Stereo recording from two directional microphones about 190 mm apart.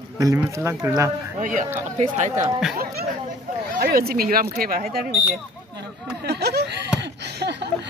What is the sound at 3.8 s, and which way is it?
Speech, 55° right (ahead or behind).